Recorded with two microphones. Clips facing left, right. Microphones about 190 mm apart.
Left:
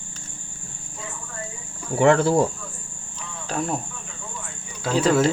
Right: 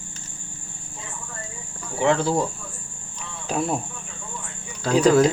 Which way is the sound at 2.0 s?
55° left (ahead or behind).